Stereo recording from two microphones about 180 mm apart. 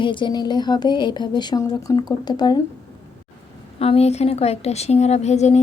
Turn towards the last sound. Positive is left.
turn(degrees=40)  # may be behind; listen again after turning